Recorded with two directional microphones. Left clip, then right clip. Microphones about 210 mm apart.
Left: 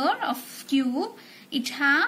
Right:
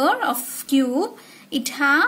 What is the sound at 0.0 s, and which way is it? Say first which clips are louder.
A woman's voice: right 6 dB; 50° right (ahead or behind).